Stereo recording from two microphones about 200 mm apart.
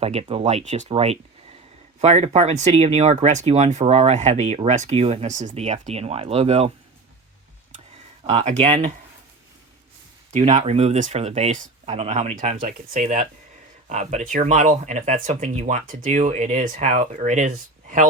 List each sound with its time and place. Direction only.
0.0 s speech: 30° right (ahead or behind)
8.2 s speech: 30° right (ahead or behind)
10.3 s speech: 35° right (ahead or behind)